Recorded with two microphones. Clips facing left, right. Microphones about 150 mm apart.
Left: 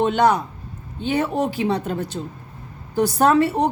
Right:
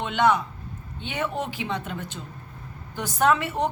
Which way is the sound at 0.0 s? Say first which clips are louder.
Left 5 dB; 40° left (ahead or behind).